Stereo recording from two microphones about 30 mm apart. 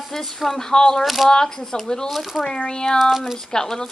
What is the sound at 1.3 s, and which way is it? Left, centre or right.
Speech, left.